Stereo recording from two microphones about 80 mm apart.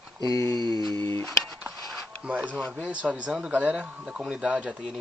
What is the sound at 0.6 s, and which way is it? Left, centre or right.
Music, right.